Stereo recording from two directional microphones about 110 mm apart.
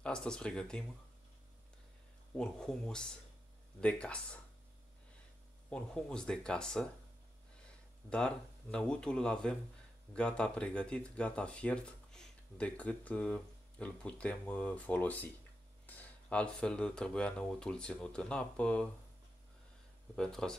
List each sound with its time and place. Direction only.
0.0 s speech: 5° left (ahead or behind)
2.3 s speech: 5° left (ahead or behind)
5.7 s speech: 5° left (ahead or behind)
8.1 s speech: 10° left (ahead or behind)
20.2 s speech: 5° left (ahead or behind)